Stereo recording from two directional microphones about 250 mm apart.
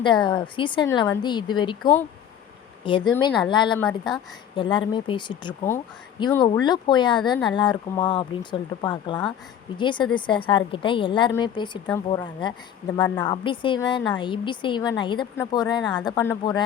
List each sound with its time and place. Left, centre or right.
0.0 s a woman's voice: centre
3.8 s a woman's voice: centre
4.5 s a woman's voice: centre